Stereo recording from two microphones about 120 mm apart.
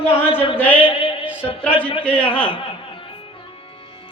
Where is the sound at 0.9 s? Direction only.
50° left (ahead or behind).